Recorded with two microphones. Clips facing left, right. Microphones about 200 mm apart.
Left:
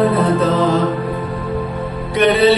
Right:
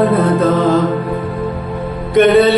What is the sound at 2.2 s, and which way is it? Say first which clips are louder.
Music: right 3 dB; 55° right (ahead or behind).